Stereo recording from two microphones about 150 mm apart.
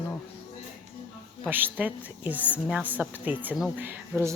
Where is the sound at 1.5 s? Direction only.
15° right (ahead or behind).